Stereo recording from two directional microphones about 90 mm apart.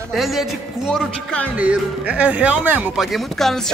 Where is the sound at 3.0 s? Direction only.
5° left (ahead or behind).